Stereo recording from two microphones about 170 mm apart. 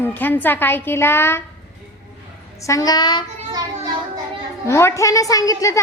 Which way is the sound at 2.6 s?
20° left (ahead or behind).